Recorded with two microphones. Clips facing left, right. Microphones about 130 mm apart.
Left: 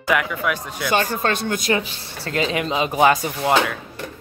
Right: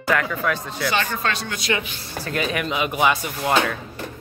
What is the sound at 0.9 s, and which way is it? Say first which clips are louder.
Speech: left 6 dB; 40° left (ahead or behind).